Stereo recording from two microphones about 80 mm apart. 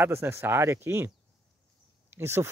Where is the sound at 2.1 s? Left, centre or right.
Right.